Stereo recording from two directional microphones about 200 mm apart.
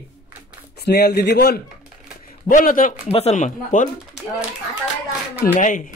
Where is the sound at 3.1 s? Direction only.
30° left (ahead or behind).